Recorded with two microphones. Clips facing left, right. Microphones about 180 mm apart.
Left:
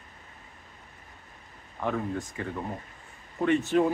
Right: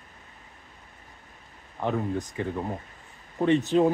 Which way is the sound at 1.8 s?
25° right (ahead or behind).